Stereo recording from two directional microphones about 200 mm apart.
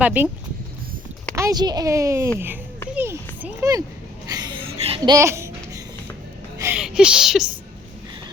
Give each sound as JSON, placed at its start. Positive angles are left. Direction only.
{"t": 0.0, "sound": "speech", "side_deg": -10}
{"t": 1.4, "sound": "a child's voice", "side_deg": -20}
{"t": 4.9, "sound": "a sound", "side_deg": -20}
{"t": 6.6, "sound": "speech", "side_deg": -10}